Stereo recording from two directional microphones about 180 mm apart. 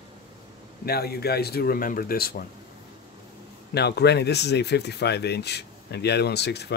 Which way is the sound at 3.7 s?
65° left (ahead or behind).